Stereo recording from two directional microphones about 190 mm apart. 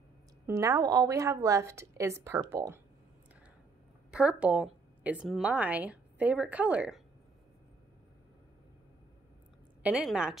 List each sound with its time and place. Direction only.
0.5 s a woman's voice: 15° right (ahead or behind)
4.1 s a woman's voice: 5° right (ahead or behind)
9.8 s a woman's voice: 5° right (ahead or behind)